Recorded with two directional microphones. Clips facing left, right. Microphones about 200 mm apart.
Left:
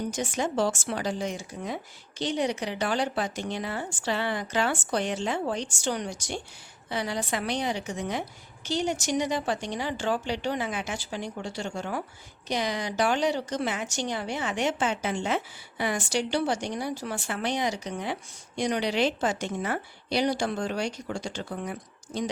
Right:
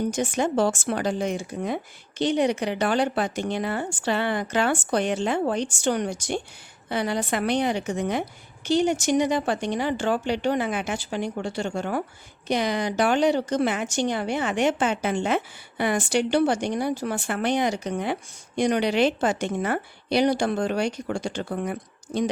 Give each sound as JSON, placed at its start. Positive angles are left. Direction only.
{"t": 0.1, "sound": "a woman's voice", "side_deg": -55}